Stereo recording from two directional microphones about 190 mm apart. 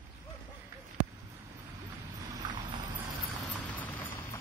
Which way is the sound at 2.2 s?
20° right (ahead or behind).